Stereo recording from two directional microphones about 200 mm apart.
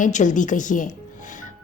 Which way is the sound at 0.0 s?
40° left (ahead or behind).